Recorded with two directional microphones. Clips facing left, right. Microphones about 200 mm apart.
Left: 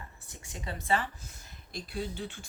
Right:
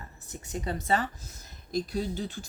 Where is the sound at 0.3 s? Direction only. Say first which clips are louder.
Right 8 dB; 40° right (ahead or behind).